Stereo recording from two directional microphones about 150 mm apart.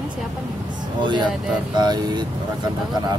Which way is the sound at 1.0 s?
30° right (ahead or behind).